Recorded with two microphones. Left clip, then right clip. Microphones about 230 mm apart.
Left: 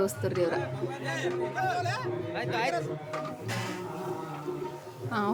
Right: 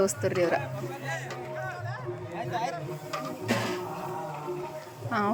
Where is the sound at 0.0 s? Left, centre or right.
Centre.